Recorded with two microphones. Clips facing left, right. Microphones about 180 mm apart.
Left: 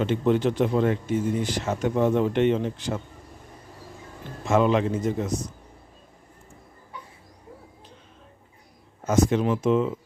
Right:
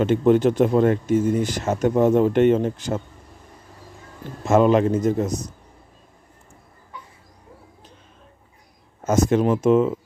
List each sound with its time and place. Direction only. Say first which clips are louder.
0.0 s speech: right 5 dB; 50° right (ahead or behind)
4.4 s speech: right 5 dB; 45° right (ahead or behind)
9.0 s speech: right 3 dB; 45° right (ahead or behind)